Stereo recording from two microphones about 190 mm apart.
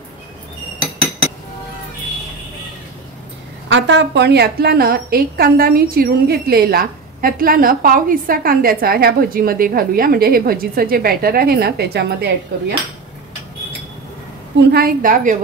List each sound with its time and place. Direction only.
3.6 s a woman's voice: 70° right (ahead or behind)
14.7 s a woman's voice: 55° right (ahead or behind)